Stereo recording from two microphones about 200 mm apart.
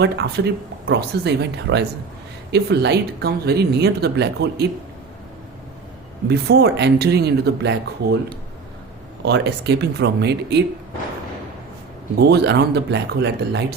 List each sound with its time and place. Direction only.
0.0 s speech: 55° right (ahead or behind)
6.2 s speech: 55° right (ahead or behind)
9.2 s speech: 55° right (ahead or behind)
12.2 s speech: 55° right (ahead or behind)